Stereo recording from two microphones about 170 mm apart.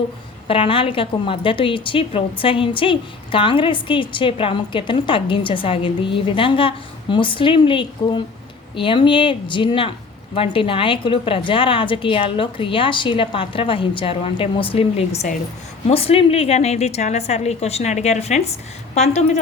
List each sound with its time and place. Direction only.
0.4 s speech: 30° left (ahead or behind)